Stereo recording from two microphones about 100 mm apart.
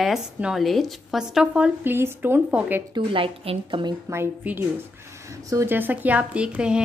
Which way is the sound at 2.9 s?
60° right (ahead or behind).